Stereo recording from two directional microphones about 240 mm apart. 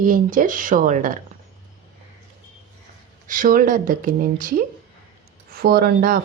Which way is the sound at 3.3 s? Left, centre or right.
Right.